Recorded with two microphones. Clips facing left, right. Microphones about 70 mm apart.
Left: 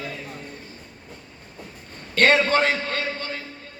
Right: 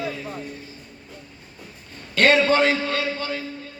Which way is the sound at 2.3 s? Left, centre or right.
Left.